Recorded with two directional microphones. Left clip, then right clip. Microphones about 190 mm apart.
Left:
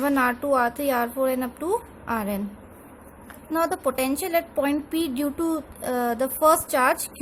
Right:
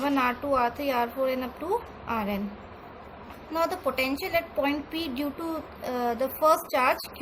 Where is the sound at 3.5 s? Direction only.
45° left (ahead or behind).